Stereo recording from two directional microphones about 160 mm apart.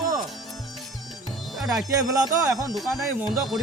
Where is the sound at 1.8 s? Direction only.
20° right (ahead or behind).